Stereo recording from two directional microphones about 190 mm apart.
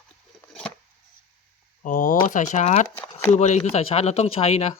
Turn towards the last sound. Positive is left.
turn(degrees=35)  # may be behind; listen again after turning